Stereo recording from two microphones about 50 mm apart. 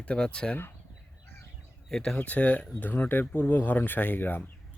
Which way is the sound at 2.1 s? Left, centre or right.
Left.